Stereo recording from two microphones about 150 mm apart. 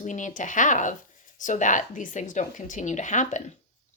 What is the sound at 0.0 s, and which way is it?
Speech, 55° left (ahead or behind).